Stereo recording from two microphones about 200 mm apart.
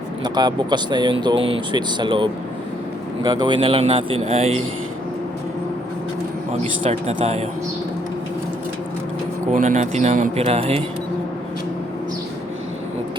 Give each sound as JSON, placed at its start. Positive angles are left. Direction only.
{"t": 0.3, "sound": "speech", "side_deg": -20}
{"t": 6.8, "sound": "speech", "side_deg": -35}
{"t": 9.5, "sound": "speech", "side_deg": -35}